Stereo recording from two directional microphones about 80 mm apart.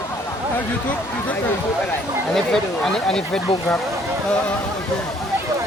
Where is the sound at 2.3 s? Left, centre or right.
Centre.